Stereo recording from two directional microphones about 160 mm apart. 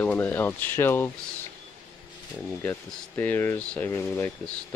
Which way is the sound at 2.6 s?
10° left (ahead or behind).